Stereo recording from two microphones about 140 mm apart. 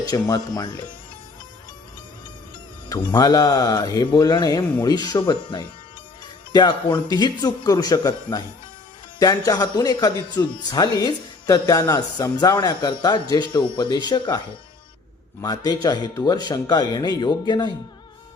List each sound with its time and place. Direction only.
0.1 s speech: 25° left (ahead or behind)
2.9 s speech: 25° left (ahead or behind)